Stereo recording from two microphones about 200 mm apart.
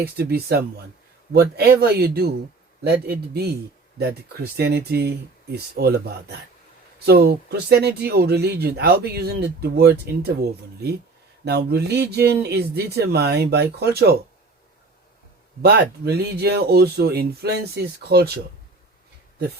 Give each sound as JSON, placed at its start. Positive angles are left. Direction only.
{"t": 0.0, "sound": "speech", "side_deg": -50}
{"t": 4.5, "sound": "speech", "side_deg": -55}
{"t": 11.4, "sound": "speech", "side_deg": -55}
{"t": 15.6, "sound": "speech", "side_deg": -55}